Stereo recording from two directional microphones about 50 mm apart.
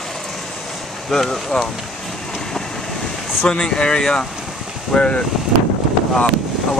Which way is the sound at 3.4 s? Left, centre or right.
Centre.